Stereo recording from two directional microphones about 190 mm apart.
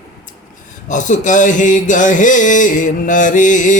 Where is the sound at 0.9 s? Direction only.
40° left (ahead or behind).